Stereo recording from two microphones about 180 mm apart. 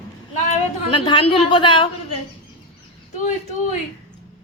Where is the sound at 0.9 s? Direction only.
30° left (ahead or behind).